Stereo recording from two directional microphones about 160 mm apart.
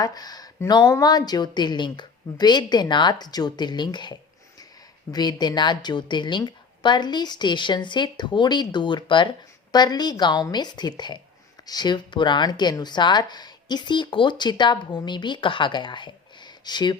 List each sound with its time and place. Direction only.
0.0 s speech: 25° left (ahead or behind)